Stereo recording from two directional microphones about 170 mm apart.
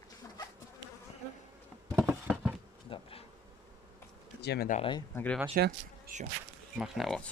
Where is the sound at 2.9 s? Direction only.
35° left (ahead or behind).